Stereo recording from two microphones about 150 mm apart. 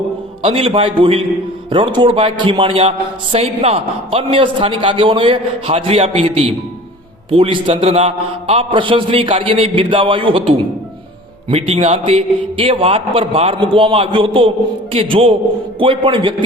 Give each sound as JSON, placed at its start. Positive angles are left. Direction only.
{"t": 0.4, "sound": "a man's voice", "side_deg": -40}